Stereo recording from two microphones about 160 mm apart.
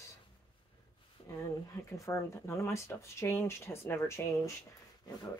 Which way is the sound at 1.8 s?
20° left (ahead or behind).